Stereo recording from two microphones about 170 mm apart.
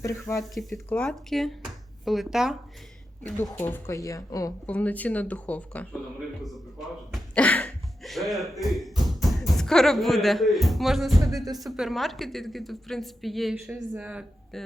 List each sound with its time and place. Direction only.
0.0 s speech: 15° left (ahead or behind)
0.5 s a woman's voice: centre (ahead or behind)
3.5 s speech: 10° left (ahead or behind)
4.6 s a woman's voice: 10° left (ahead or behind)